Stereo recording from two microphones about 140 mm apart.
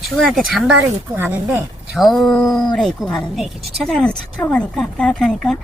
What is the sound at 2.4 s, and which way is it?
Speech, 25° left (ahead or behind).